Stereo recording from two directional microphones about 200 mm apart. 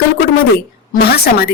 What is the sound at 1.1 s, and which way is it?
Speech, 50° left (ahead or behind).